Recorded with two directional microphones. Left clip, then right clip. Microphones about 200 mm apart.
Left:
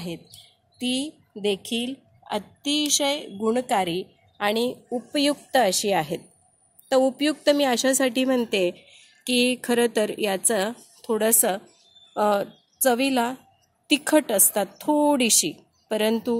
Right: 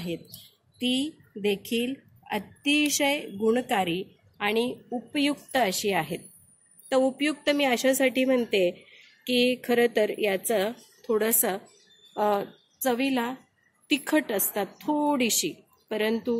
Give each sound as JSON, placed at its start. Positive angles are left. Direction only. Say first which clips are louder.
{"t": 0.7, "sound": "a woman's voice", "louder": "even", "side_deg": 35}